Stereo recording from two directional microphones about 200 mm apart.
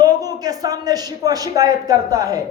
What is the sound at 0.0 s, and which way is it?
Speech, 20° right (ahead or behind).